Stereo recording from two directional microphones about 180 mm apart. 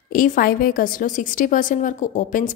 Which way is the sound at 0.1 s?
50° left (ahead or behind).